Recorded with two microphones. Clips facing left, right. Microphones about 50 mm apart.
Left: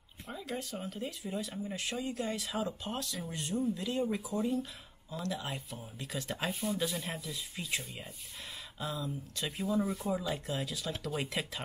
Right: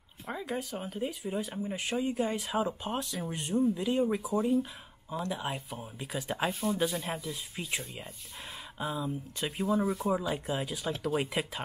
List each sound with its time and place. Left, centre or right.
0.3 s speech: centre
8.7 s speech: right
9.8 s speech: centre
10.1 s speech: centre